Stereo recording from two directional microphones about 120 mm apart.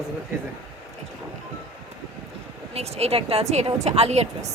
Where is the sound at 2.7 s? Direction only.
60° right (ahead or behind).